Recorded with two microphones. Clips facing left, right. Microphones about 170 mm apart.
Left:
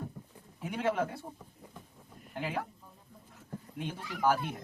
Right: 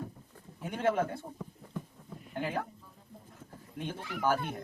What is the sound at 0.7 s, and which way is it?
Speech, 50° right (ahead or behind).